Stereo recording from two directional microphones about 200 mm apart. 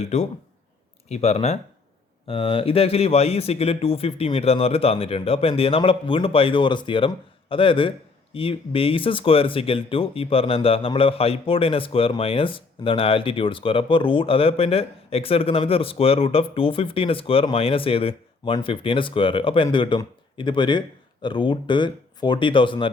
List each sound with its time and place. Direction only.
0.0 s a man's voice: 35° left (ahead or behind)